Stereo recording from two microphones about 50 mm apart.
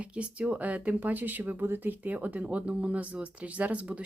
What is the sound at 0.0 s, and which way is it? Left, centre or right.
Speech, right.